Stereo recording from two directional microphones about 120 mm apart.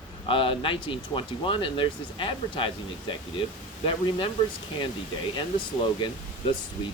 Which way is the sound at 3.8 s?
45° left (ahead or behind).